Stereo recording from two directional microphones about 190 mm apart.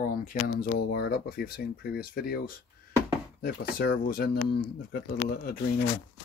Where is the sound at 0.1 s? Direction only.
45° left (ahead or behind).